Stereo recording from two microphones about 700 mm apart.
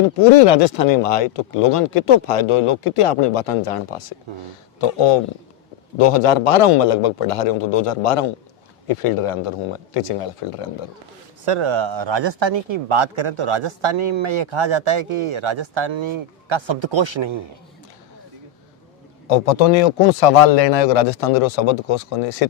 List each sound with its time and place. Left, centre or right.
0.2 s speech: left
11.4 s a man's voice: right
19.3 s speech: left